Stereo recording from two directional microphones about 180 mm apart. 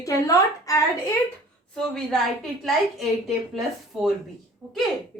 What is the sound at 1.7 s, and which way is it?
Speech, centre (ahead or behind).